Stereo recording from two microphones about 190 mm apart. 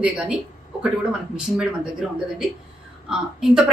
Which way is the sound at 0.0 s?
5° right (ahead or behind).